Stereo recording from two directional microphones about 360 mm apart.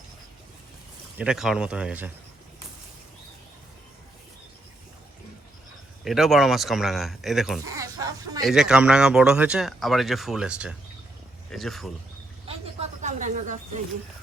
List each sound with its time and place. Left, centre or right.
1.2 s speech: centre
6.1 s speech: centre
12.5 s a sound: centre